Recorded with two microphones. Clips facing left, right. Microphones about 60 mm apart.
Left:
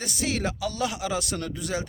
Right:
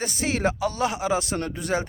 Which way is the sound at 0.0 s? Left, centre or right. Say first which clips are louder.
Right 4 dB; right.